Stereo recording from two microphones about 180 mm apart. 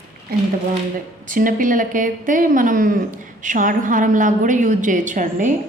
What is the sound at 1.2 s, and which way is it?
A woman's voice, 50° right (ahead or behind).